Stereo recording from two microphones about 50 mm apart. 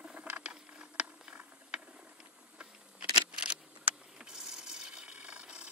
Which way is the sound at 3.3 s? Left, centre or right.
Centre.